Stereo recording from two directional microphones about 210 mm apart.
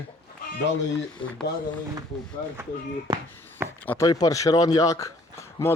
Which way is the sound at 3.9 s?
15° left (ahead or behind).